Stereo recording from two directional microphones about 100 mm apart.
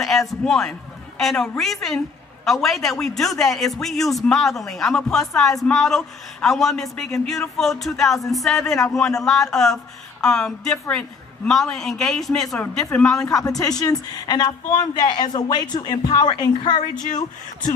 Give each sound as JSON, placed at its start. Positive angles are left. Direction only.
{"t": 0.0, "sound": "a man's voice", "side_deg": 5}
{"t": 13.2, "sound": "a woman's voice", "side_deg": 35}